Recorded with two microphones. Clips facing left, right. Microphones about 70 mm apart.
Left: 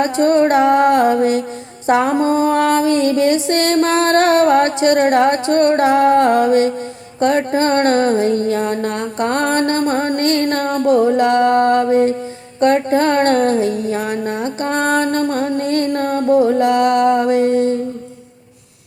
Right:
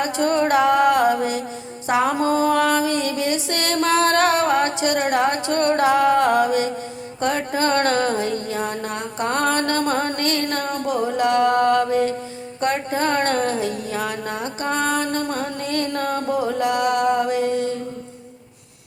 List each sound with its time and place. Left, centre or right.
0.0 s a sound: left
12.5 s music: left
14.6 s music: left